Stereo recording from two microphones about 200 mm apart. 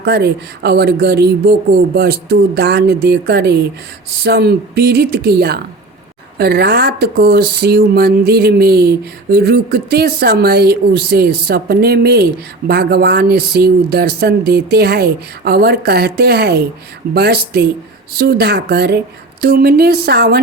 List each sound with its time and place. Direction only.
0.0 s speech: 55° right (ahead or behind)